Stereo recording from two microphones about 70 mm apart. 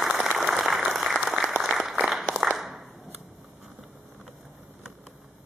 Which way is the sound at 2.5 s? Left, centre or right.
Centre.